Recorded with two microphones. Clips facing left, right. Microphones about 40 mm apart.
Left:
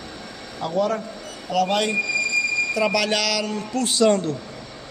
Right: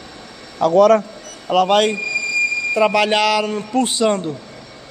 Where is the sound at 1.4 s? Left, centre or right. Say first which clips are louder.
Right 7 dB; right.